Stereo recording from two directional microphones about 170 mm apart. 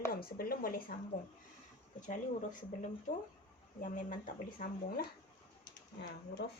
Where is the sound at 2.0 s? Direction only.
50° left (ahead or behind).